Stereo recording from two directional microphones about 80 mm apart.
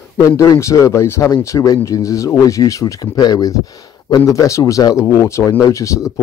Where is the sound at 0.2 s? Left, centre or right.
Left.